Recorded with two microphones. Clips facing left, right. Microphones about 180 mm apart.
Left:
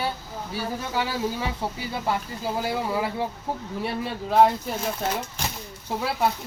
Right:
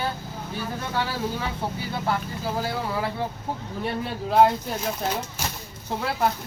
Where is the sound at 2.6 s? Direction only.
15° left (ahead or behind).